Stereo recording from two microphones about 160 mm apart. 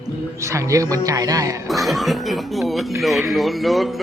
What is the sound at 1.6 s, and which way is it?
Speech, centre (ahead or behind).